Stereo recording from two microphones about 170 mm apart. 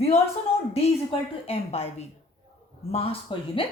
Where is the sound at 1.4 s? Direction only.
35° left (ahead or behind).